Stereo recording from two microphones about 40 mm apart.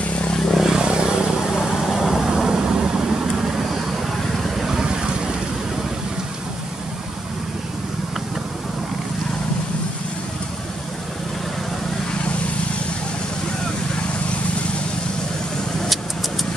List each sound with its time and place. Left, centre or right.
0.6 s vehicle: centre
0.8 s vehicle: right
1.6 s vehicle: centre
2.0 s vehicle: centre